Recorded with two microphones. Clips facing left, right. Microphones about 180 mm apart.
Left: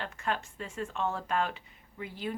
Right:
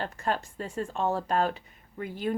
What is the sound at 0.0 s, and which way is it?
Speech, 35° right (ahead or behind).